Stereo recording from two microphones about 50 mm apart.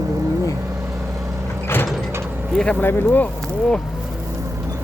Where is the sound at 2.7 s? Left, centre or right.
Left.